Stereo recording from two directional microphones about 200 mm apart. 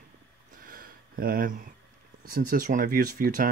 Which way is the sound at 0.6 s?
45° right (ahead or behind).